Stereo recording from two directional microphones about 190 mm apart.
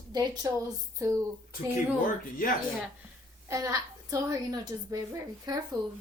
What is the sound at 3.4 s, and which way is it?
A woman's voice, 15° right (ahead or behind).